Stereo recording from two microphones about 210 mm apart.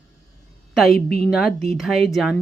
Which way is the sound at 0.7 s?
Centre (ahead or behind).